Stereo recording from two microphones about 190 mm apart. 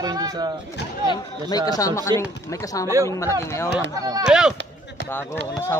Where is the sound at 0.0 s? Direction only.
20° right (ahead or behind).